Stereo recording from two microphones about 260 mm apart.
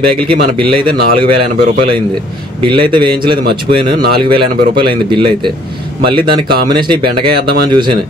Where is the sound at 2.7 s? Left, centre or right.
Centre.